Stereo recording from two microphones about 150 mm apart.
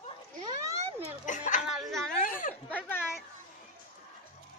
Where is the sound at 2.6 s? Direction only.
10° left (ahead or behind).